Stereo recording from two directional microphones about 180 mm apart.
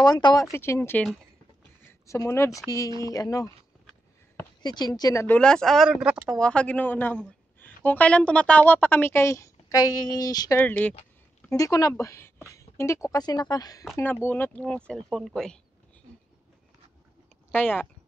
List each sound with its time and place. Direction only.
0.0 s a woman's voice: 20° left (ahead or behind)
4.6 s speech: 20° left (ahead or behind); by 6.4 s 5° right (ahead or behind)
6.4 s a woman's voice: 5° left (ahead or behind); by 10.6 s 20° left (ahead or behind)
10.6 s a woman's voice: 10° left (ahead or behind)
11.5 s speech: 20° left (ahead or behind); by 15.6 s 5° left (ahead or behind)
17.5 s speech: 10° left (ahead or behind)